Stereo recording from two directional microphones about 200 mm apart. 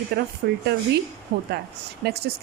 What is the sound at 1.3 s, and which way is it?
Speech, 60° right (ahead or behind).